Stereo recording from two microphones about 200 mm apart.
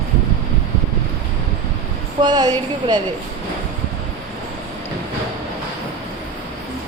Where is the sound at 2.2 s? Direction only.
20° right (ahead or behind).